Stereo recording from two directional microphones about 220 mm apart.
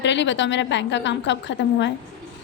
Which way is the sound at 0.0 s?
55° left (ahead or behind).